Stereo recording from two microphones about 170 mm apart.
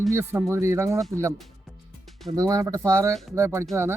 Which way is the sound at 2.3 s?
20° right (ahead or behind).